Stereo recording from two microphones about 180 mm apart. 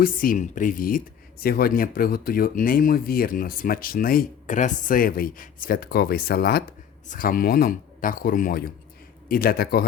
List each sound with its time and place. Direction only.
0.0 s speech: 50° left (ahead or behind)
7.1 s a man's voice: 50° left (ahead or behind)